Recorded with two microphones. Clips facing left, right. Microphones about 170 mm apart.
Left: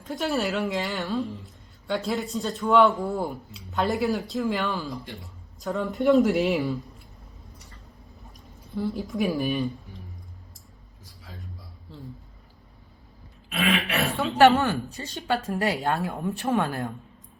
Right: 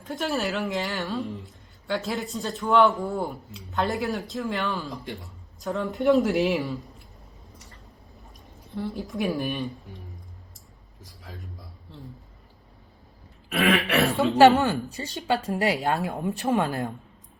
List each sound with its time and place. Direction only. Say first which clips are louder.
0.1 s a woman's voice: left 1 dB; centre (ahead or behind)
8.7 s a woman's voice: left 2 dB; centre (ahead or behind)
14.3 s a woman's voice: right 1 dB; 20° right (ahead or behind)